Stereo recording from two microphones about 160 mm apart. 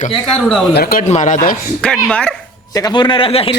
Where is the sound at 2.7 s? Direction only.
25° left (ahead or behind).